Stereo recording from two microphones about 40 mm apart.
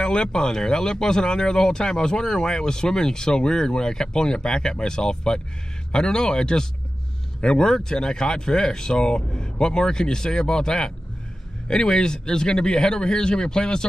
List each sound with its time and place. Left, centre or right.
0.0 s speech: left